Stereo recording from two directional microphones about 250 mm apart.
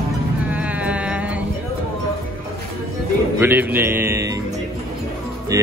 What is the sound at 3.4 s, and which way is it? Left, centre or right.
Speech, centre.